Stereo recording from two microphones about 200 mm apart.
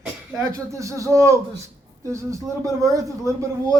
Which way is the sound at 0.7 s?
15° right (ahead or behind).